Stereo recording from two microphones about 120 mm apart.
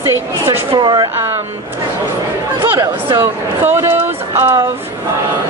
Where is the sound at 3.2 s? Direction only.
20° right (ahead or behind).